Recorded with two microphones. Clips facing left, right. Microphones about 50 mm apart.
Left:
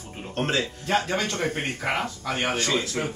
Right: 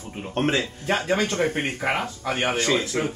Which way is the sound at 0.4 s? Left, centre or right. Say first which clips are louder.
Right 2 dB; centre.